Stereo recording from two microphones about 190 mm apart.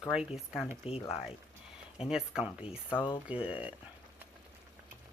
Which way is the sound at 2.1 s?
5° right (ahead or behind).